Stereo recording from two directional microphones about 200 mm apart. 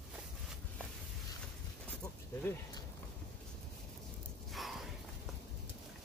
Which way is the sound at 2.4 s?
10° left (ahead or behind).